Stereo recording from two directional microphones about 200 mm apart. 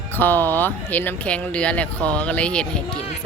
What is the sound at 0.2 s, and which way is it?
Speech, 10° left (ahead or behind).